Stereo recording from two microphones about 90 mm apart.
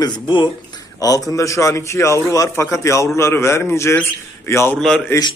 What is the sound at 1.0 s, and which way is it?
A man's voice, 40° left (ahead or behind).